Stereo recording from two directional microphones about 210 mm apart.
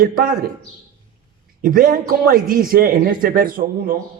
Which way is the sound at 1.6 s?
40° right (ahead or behind).